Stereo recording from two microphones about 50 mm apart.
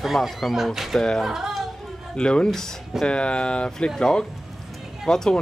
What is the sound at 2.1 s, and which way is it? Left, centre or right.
Speech, centre.